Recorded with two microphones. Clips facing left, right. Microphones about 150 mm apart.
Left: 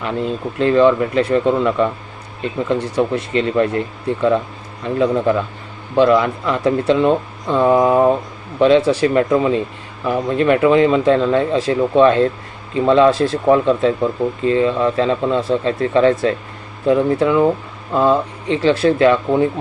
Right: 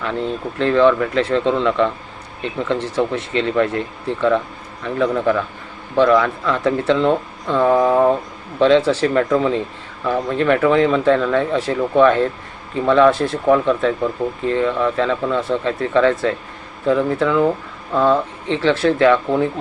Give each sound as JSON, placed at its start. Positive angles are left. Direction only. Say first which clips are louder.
{"t": 0.0, "sound": "speech", "louder": "left 1 dB", "side_deg": 15}
{"t": 13.1, "sound": "speech", "louder": "left 3 dB", "side_deg": -20}
{"t": 13.4, "sound": "speech", "louder": "left 1 dB", "side_deg": 20}